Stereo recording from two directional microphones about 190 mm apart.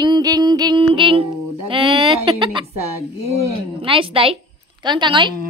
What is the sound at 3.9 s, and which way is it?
Female singing, 30° right (ahead or behind).